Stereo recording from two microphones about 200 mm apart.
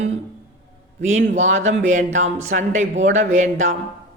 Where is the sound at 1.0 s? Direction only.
35° right (ahead or behind).